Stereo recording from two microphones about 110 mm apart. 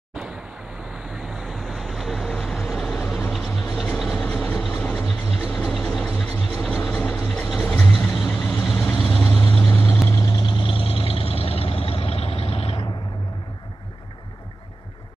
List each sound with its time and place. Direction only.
0.9 s vehicle: 5° right (ahead or behind)
10.1 s vehicle: 40° left (ahead or behind); by 12.8 s 60° left (ahead or behind)